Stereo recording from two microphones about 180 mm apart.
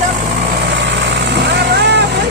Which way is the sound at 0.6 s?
80° right.